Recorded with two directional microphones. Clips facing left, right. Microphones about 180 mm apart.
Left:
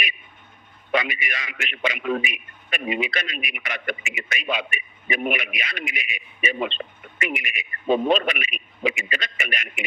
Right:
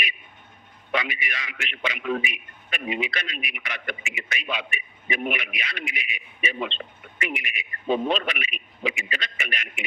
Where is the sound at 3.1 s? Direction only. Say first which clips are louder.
Left 3 dB; 50° left (ahead or behind).